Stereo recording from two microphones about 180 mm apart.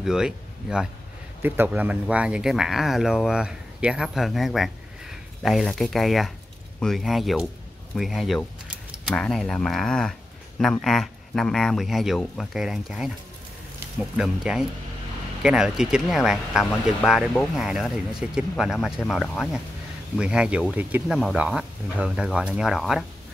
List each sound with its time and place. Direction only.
0.0 s speech: 5° right (ahead or behind)